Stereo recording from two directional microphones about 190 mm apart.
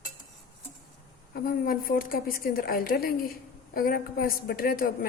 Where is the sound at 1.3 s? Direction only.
50° left (ahead or behind).